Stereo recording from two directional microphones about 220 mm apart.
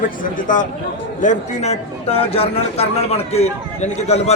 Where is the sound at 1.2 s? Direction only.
30° left (ahead or behind).